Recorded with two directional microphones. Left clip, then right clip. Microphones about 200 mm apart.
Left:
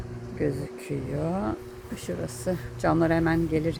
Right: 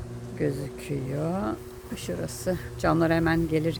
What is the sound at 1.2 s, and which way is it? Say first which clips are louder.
Speech: left 1 dB; 5° right (ahead or behind).